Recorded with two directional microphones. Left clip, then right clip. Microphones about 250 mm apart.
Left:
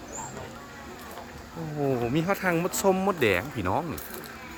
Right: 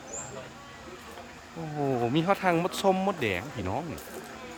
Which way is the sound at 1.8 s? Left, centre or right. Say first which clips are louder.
Left 1 dB; centre.